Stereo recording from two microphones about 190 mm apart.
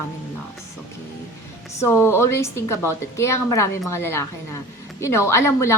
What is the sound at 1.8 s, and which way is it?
A woman's voice, 15° left (ahead or behind).